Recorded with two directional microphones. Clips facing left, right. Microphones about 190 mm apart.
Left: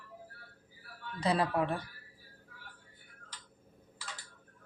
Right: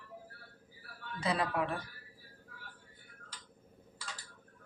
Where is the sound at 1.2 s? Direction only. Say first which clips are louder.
Left 3 dB; 35° left (ahead or behind).